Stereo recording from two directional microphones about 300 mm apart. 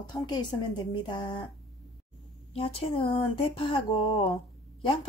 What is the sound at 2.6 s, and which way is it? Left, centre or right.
A woman's voice, centre.